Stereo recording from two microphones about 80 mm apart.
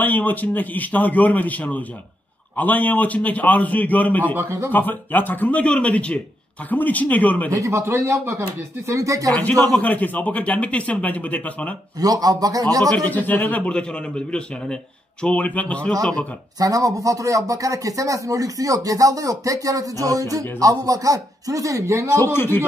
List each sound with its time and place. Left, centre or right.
0.0 s speech: left
4.4 s speech: right
4.7 s speech: left
7.6 s speech: right
9.3 s speech: centre
12.0 s speech: right
12.9 s speech: left
16.5 s speech: right
22.1 s speech: left